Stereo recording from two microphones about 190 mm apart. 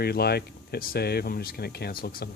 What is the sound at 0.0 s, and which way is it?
Speech, 55° left (ahead or behind).